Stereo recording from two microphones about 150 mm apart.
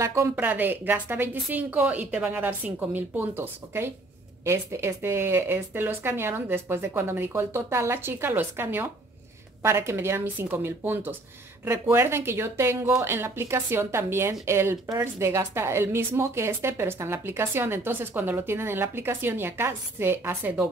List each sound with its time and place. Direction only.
0.0 s a woman's voice: 20° right (ahead or behind)